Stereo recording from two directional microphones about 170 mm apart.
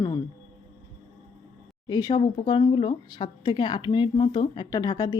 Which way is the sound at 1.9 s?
25° left (ahead or behind).